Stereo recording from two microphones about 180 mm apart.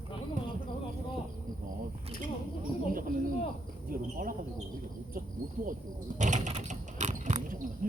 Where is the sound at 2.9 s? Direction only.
50° right (ahead or behind).